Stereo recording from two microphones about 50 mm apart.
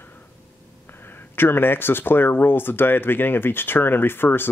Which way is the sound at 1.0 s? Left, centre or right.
Left.